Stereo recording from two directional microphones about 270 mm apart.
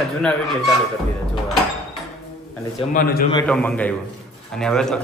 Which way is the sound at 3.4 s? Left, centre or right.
Centre.